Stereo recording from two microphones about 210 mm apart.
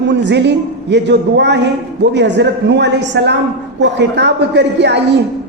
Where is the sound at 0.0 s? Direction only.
55° right (ahead or behind).